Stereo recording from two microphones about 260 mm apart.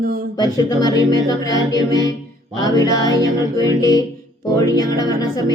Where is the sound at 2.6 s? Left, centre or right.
Centre.